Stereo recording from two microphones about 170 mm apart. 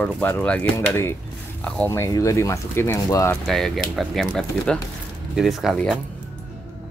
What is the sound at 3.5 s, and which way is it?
Speech, centre (ahead or behind).